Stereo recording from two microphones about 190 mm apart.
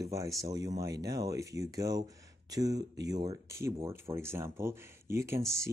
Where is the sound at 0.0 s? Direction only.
15° right (ahead or behind).